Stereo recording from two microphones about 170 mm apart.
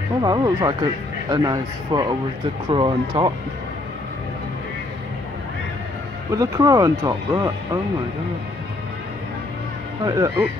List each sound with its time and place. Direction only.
0.2 s speech: 25° right (ahead or behind)
6.3 s speech: 20° right (ahead or behind)
10.0 s speech: 20° right (ahead or behind)